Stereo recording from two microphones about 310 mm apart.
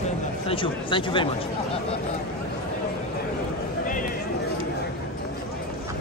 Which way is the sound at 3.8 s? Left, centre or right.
Left.